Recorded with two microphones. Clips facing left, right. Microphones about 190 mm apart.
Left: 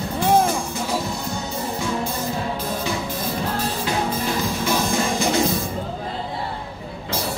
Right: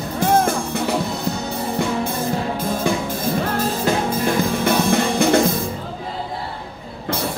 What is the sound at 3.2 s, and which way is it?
Music, 50° right (ahead or behind).